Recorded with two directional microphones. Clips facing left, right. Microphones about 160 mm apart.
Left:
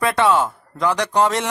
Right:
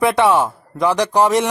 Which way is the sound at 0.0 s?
20° right (ahead or behind).